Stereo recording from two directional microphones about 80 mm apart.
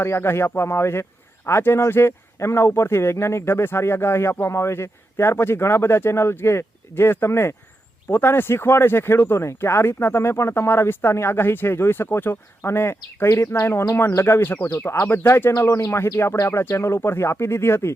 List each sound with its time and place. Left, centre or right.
0.0 s a man's voice: left